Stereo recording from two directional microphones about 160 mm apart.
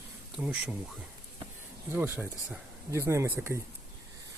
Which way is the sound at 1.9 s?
15° right (ahead or behind).